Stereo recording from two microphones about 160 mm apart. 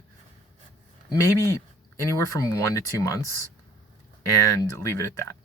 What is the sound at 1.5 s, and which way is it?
Speech, 20° left (ahead or behind).